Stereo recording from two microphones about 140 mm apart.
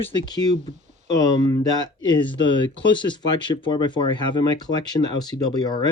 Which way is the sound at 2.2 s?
35° left (ahead or behind).